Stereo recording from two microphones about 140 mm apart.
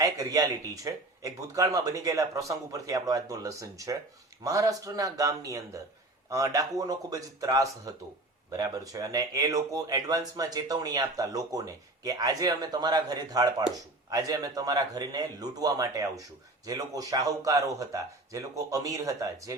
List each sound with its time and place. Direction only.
0.0 s speech: 25° right (ahead or behind)